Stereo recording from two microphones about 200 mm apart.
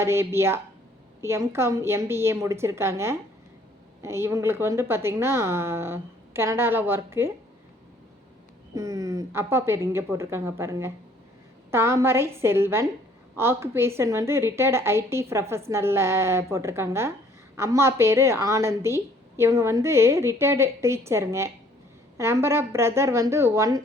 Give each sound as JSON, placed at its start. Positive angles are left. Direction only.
{"t": 0.0, "sound": "a woman's voice", "side_deg": -15}
{"t": 8.7, "sound": "a woman's voice", "side_deg": -15}